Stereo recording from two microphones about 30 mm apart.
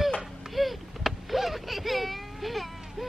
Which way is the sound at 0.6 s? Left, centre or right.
Centre.